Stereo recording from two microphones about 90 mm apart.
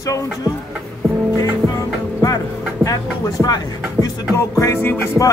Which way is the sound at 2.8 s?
45° left (ahead or behind).